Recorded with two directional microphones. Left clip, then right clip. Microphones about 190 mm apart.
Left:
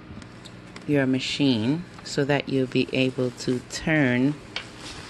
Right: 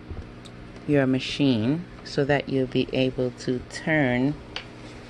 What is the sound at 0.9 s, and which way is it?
Speech, 5° left (ahead or behind).